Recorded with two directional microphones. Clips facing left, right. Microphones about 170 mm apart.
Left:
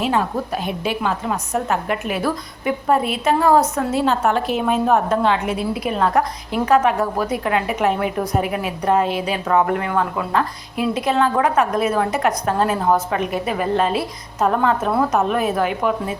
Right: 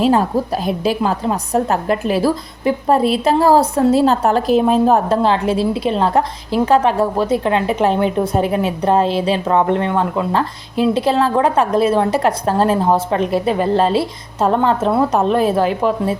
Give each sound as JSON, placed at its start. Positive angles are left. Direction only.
{"t": 0.0, "sound": "a woman's voice", "side_deg": -35}